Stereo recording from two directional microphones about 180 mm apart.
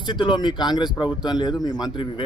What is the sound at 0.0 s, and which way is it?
A man's voice, 25° left (ahead or behind).